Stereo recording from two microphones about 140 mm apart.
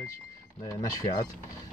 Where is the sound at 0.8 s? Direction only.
25° left (ahead or behind).